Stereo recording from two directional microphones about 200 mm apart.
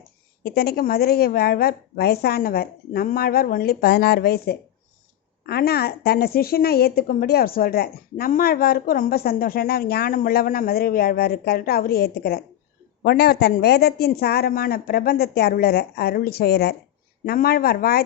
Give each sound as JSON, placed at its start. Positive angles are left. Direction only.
{"t": 0.4, "sound": "a woman's voice", "side_deg": 50}